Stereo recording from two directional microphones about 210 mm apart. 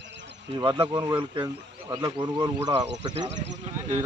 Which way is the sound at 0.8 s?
20° right (ahead or behind).